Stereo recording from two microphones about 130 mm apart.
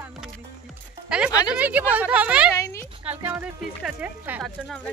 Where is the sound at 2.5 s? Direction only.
25° left (ahead or behind).